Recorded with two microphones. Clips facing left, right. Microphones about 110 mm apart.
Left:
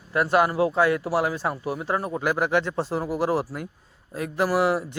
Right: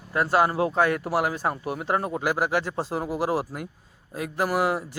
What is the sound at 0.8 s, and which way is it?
Speech, 45° right (ahead or behind).